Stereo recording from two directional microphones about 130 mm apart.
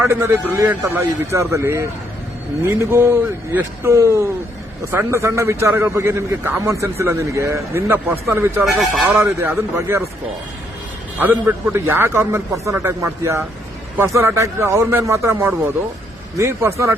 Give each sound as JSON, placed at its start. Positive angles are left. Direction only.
{"t": 0.0, "sound": "a man's voice", "side_deg": -20}
{"t": 11.2, "sound": "a man's voice", "side_deg": -15}